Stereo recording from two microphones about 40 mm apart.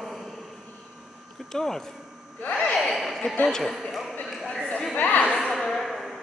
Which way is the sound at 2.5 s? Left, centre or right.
Left.